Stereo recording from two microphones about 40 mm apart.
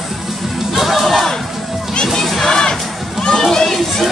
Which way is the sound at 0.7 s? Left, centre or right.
Centre.